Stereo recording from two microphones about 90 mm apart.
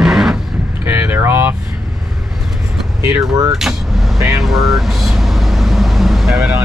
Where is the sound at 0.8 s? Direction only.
25° right (ahead or behind).